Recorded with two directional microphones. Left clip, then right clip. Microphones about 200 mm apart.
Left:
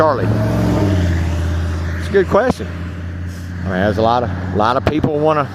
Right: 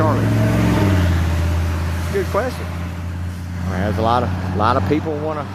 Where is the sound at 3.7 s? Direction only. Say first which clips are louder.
Left 4 dB; 30° left (ahead or behind).